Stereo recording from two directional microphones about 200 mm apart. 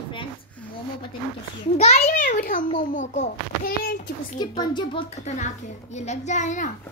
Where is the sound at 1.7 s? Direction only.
35° left (ahead or behind).